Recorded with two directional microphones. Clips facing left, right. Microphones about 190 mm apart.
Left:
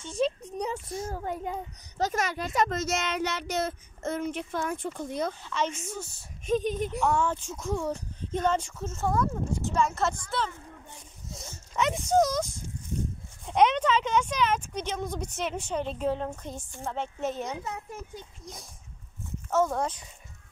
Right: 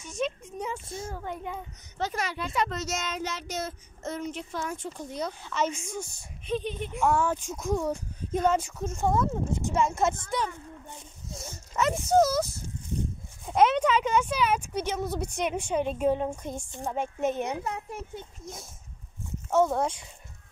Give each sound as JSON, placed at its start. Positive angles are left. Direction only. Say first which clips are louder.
{"t": 0.0, "sound": "a sound", "louder": "left 3 dB", "side_deg": 35}
{"t": 1.1, "sound": "a child's voice", "louder": "left 3 dB", "side_deg": 40}
{"t": 5.4, "sound": "a woman's voice", "louder": "right 1 dB", "side_deg": -10}
{"t": 6.4, "sound": "a child's voice", "louder": "left 4 dB", "side_deg": 45}
{"t": 7.0, "sound": "a woman's voice", "louder": "right 4 dB", "side_deg": -10}
{"t": 11.3, "sound": "speech", "louder": "even", "side_deg": 0}
{"t": 13.5, "sound": "a woman's voice", "louder": "right 1 dB", "side_deg": -5}
{"t": 18.4, "sound": "a woman's voice", "louder": "right 3 dB", "side_deg": 0}